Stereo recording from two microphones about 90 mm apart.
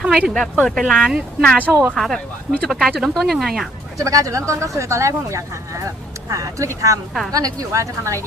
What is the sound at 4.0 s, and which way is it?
Speech, 35° right (ahead or behind).